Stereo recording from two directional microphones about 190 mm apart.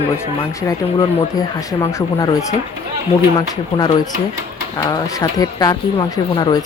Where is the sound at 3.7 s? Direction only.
20° left (ahead or behind).